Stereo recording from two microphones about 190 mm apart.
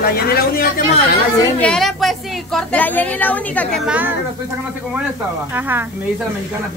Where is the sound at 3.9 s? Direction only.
10° right (ahead or behind).